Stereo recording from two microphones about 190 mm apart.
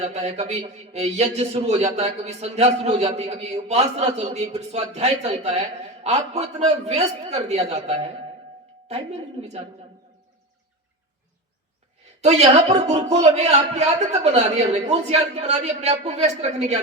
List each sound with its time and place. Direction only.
0.0 s a man's voice: 35° right (ahead or behind)
12.2 s a man's voice: 35° right (ahead or behind)